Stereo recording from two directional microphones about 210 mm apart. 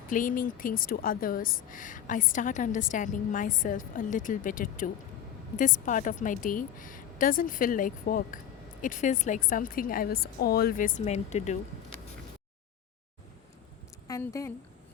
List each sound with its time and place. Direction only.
0.1 s a woman's voice: 40° left (ahead or behind)
14.1 s speech: 15° left (ahead or behind)